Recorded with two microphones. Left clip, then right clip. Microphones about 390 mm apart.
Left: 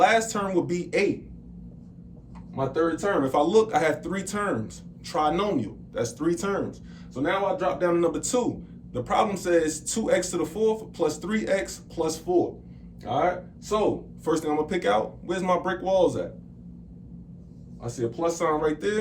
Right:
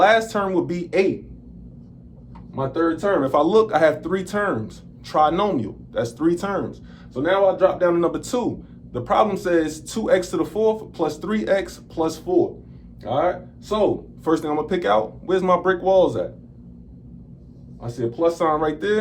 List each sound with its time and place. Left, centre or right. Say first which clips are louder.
0.0 s speech: right 5 dB; centre
2.6 s speech: right 3 dB; centre
13.7 s speech: right 4 dB; centre
17.8 s speech: right 6 dB; centre